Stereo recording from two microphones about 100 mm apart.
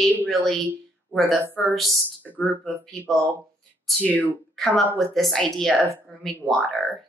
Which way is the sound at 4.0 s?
15° left (ahead or behind).